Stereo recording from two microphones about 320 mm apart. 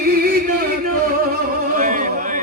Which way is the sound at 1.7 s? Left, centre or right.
Right.